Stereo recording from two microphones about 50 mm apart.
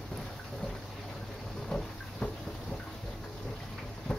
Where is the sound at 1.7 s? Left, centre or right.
Centre.